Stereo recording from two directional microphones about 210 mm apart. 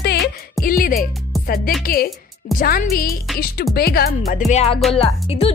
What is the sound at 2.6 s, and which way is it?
Speech, 45° left (ahead or behind).